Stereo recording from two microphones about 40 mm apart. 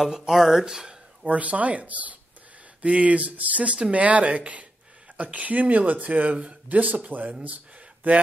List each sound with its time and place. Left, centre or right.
0.3 s speech: centre
1.2 s speech: right